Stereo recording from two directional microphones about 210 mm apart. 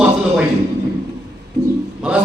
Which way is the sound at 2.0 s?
5° right (ahead or behind).